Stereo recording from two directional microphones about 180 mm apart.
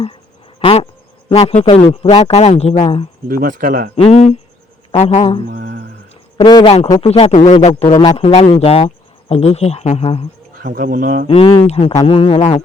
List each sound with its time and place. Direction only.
0.6 s speech: 30° left (ahead or behind)
3.2 s speech: 50° right (ahead or behind)
3.9 s speech: 35° left (ahead or behind)
5.5 s a sound: 70° right (ahead or behind)
6.3 s speech: 25° left (ahead or behind)
7.1 s speech: 35° left (ahead or behind)
10.6 s speech: 50° right (ahead or behind)
11.3 s speech: 35° left (ahead or behind)